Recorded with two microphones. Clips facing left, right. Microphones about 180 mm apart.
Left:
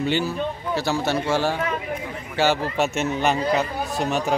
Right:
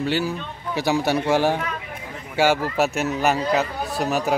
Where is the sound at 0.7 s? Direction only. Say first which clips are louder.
Right 3 dB; 15° right (ahead or behind).